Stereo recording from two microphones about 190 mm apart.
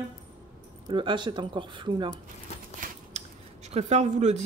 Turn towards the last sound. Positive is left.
turn(degrees=-35)  # may be behind; listen again after turning